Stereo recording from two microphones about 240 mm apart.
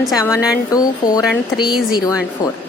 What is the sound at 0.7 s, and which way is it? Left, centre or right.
A woman's voice, centre.